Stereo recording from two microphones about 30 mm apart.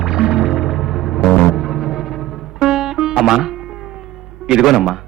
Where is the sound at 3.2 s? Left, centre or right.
Centre.